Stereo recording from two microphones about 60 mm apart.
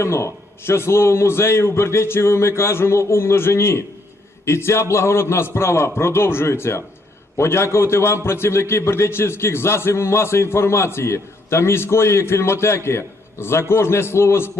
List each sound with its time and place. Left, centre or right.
0.0 s a man's voice: left